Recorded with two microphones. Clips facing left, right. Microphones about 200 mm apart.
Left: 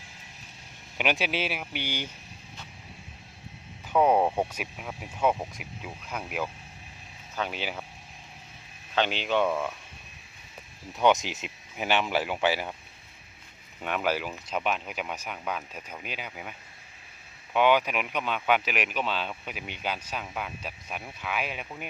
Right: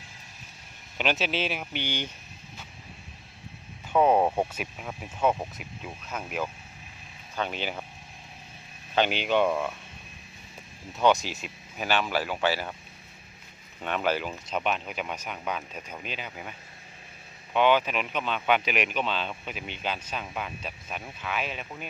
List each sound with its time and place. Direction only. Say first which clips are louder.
0.9 s speech: even; 10° left (ahead or behind)
3.9 s a sound: right 1 dB; 5° right (ahead or behind)
4.5 s speech: right 1 dB; 5° left (ahead or behind)
5.5 s speech: even; 10° left (ahead or behind)
9.0 s speech: right 2 dB; 5° right (ahead or behind)
11.0 s speech: even; 20° left (ahead or behind)
13.8 s speech: right 1 dB; 5° left (ahead or behind)
17.5 s speech: even; 10° left (ahead or behind)